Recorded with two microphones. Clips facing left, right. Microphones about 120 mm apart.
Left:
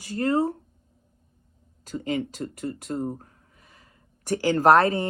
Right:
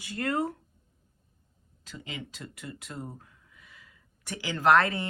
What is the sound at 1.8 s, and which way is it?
Speech, 45° left (ahead or behind).